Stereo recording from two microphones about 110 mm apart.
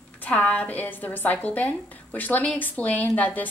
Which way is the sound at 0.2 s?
15° left (ahead or behind).